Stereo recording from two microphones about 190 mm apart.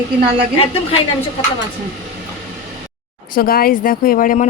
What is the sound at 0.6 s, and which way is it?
Speech, 30° left (ahead or behind).